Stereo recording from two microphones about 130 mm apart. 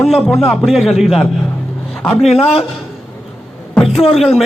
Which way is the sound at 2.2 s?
50° left (ahead or behind).